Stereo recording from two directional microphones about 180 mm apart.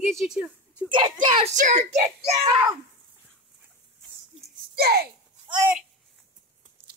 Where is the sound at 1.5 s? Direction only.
45° right (ahead or behind).